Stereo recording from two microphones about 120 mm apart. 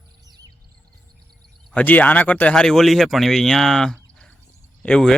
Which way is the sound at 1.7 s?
15° left (ahead or behind).